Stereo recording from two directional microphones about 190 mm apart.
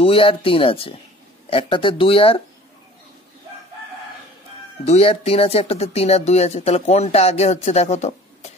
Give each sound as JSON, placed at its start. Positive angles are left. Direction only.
{"t": 0.0, "sound": "speech", "side_deg": 30}
{"t": 4.8, "sound": "speech", "side_deg": 30}